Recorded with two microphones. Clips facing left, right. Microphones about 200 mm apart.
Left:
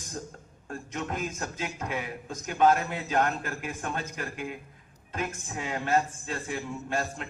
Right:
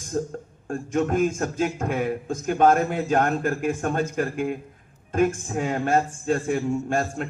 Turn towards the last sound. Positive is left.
turn(degrees=-50)  # may be behind; listen again after turning